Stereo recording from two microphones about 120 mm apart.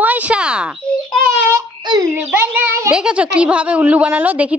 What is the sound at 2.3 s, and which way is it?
Speech, 15° right (ahead or behind).